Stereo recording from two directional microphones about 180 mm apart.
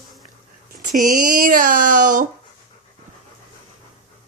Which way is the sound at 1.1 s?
50° right (ahead or behind).